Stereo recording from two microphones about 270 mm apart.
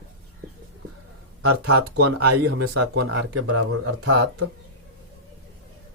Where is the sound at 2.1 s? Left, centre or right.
Right.